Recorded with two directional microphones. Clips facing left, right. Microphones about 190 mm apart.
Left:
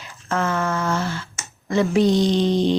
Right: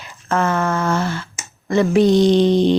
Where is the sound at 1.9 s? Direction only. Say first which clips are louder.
Right 6 dB; 60° right (ahead or behind).